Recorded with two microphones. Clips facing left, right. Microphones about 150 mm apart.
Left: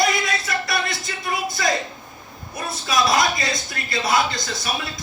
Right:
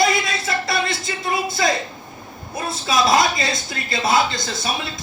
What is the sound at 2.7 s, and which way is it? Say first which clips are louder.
A man's voice: right 2 dB; 25° right (ahead or behind).